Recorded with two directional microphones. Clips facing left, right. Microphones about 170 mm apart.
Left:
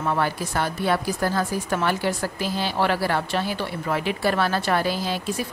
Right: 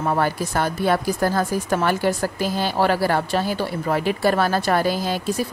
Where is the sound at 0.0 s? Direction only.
40° right (ahead or behind).